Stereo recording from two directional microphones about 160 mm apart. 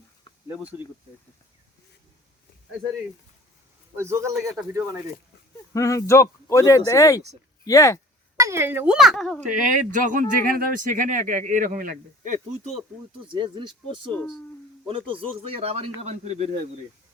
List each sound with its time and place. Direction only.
0.4 s speech: 15° right (ahead or behind)
3.9 s speech: 15° right (ahead or behind)
5.7 s speech: 20° left (ahead or behind)
8.4 s speech: 15° right (ahead or behind); by 9.4 s 5° left (ahead or behind)
9.5 s speech: 55° right (ahead or behind)
13.3 s a man's voice: 30° right (ahead or behind)
14.0 s speech: 5° left (ahead or behind)
14.8 s a man's voice: 35° right (ahead or behind)